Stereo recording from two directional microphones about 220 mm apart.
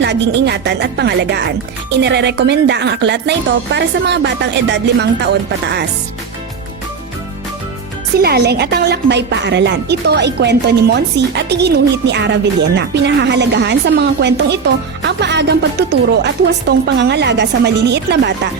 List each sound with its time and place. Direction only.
0.0 s a woman's voice: 50° right (ahead or behind)
8.2 s a woman's voice: 45° right (ahead or behind)